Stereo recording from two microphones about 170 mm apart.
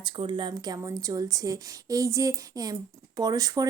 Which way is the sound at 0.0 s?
30° right (ahead or behind).